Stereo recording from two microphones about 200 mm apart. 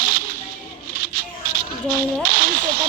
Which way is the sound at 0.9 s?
45° right (ahead or behind).